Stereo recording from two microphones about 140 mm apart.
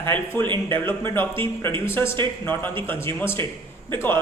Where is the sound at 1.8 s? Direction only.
20° left (ahead or behind).